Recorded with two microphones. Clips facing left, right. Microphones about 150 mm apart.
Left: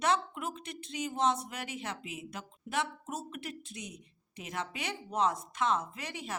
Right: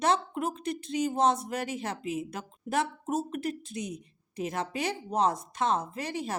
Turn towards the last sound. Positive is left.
turn(degrees=-40)  # may be behind; listen again after turning